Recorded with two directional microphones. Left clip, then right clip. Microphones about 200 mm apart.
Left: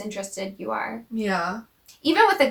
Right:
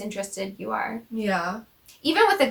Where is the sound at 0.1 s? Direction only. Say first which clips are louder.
Right 1 dB; 15° right (ahead or behind).